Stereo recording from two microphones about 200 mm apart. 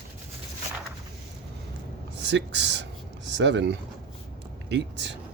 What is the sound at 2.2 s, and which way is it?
Speech, 60° right (ahead or behind).